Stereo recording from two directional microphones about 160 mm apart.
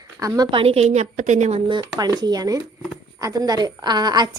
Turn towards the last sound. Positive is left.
turn(degrees=-25)  # may be behind; listen again after turning